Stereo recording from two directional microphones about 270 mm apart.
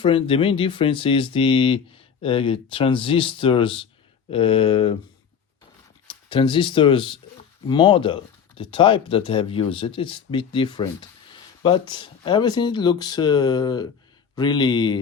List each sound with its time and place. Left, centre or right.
0.0 s speech: centre
6.1 s speech: centre